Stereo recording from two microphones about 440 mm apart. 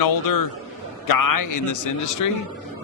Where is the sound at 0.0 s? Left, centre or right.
Left.